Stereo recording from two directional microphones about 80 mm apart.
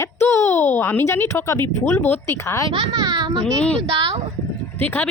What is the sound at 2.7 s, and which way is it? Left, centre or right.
Speech, right.